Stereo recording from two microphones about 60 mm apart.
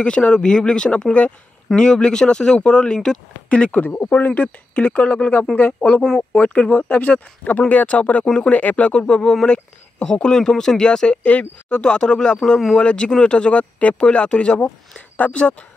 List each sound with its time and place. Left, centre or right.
0.0 s speech: centre
11.8 s speech: centre
12.7 s speech: centre